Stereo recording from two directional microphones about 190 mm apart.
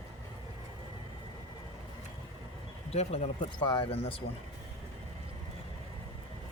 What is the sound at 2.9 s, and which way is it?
Speech, 35° left (ahead or behind).